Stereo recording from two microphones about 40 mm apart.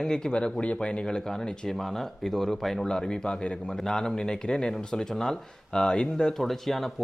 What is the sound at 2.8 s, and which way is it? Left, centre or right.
Speech, centre.